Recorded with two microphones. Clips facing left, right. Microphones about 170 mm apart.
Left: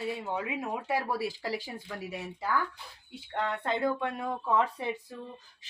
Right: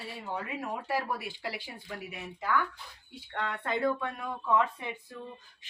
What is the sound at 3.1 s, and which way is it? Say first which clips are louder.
Speech: left 3 dB; 25° left (ahead or behind).